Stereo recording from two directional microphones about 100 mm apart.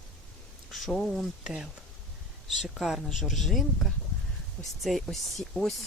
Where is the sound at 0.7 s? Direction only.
5° left (ahead or behind).